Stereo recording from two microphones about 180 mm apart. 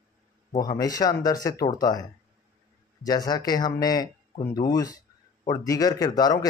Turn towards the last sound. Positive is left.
turn(degrees=20)  # may be behind; listen again after turning